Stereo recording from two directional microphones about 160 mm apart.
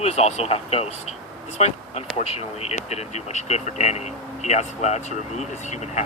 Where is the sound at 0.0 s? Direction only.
40° left (ahead or behind).